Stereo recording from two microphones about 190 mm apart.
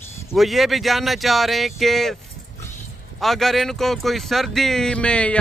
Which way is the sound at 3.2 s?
Centre (ahead or behind).